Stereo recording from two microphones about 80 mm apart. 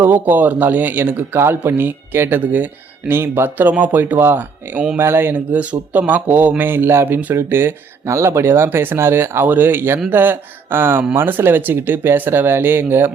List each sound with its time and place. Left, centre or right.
0.0 s speech: right